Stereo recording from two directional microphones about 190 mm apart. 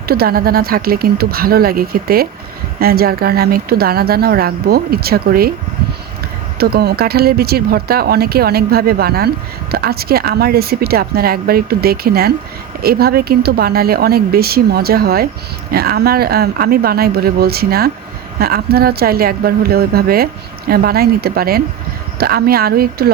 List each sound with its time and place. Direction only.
0.1 s speech: 50° right (ahead or behind)
6.6 s speech: 55° right (ahead or behind)